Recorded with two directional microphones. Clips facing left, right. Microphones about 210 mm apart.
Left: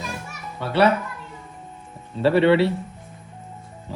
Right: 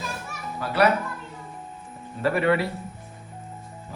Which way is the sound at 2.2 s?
30° left (ahead or behind).